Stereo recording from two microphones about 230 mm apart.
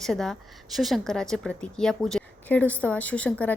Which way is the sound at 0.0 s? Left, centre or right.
Centre.